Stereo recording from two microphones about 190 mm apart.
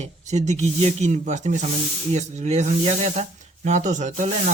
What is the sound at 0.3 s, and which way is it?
Speech, 40° right (ahead or behind).